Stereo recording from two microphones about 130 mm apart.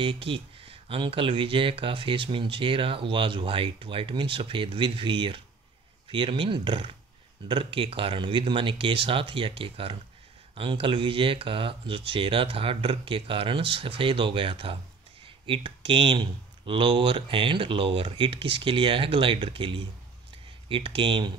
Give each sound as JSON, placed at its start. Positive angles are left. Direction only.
{"t": 0.0, "sound": "speech", "side_deg": -40}